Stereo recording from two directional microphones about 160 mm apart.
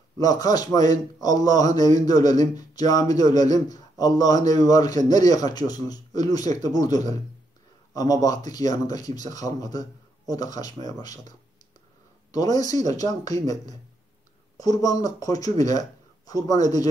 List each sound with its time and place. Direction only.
0.2 s a man's voice: 25° left (ahead or behind)
12.3 s a man's voice: 25° left (ahead or behind)
14.6 s a man's voice: 25° left (ahead or behind)